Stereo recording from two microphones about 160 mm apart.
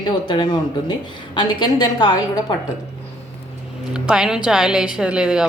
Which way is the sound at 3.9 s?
5° right (ahead or behind).